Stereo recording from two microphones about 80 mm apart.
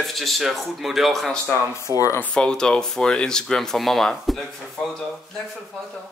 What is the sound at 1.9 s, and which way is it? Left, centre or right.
Speech, right.